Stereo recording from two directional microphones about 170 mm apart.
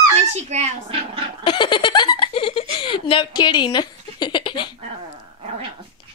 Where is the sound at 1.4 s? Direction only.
30° left (ahead or behind).